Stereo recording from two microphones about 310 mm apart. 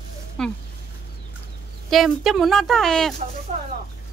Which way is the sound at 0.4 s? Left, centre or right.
Centre.